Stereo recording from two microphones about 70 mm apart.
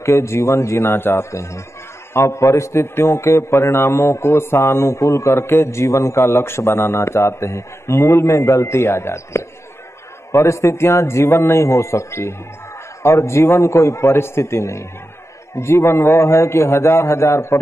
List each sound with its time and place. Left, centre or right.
0.0 s a man's voice: left
1.3 s a man's voice: left